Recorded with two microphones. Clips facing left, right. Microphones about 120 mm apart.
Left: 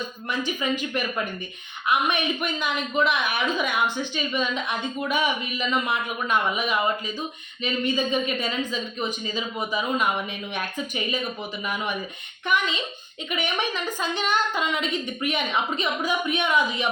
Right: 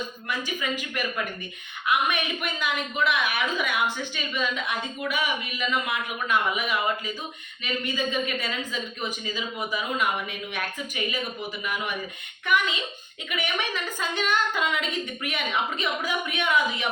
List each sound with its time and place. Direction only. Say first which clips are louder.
0.3 s a woman's voice: left 4 dB; 25° left (ahead or behind)